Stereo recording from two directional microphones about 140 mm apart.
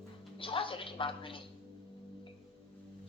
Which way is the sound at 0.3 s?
40° left (ahead or behind).